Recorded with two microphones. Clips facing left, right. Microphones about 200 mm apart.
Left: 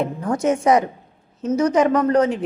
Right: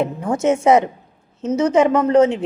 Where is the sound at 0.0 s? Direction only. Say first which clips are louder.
Right 2 dB; 25° right (ahead or behind).